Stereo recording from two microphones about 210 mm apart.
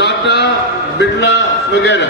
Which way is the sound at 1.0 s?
55° left (ahead or behind).